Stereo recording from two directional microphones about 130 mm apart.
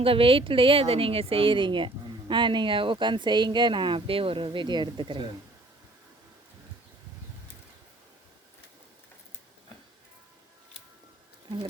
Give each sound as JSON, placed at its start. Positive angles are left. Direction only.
{"t": 0.0, "sound": "speech", "side_deg": -45}